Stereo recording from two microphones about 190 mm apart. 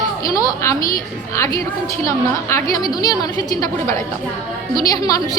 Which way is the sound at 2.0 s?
15° left (ahead or behind).